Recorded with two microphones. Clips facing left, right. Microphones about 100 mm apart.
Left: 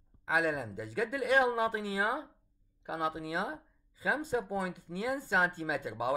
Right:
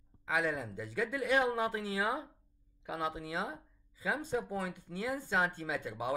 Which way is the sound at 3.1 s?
40° left (ahead or behind).